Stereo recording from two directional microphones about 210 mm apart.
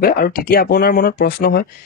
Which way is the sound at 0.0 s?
45° left (ahead or behind).